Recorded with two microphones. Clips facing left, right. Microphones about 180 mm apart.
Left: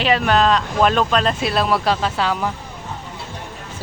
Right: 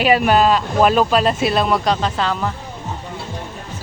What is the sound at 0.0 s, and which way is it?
Speech, 10° right (ahead or behind).